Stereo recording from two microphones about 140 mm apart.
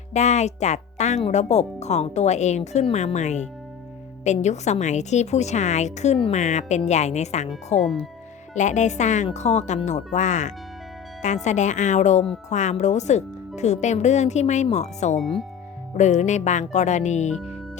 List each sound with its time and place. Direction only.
0.1 s a woman's voice: 55° left (ahead or behind)